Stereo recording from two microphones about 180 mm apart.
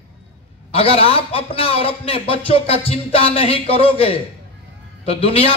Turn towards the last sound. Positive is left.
turn(degrees=30)  # may be behind; listen again after turning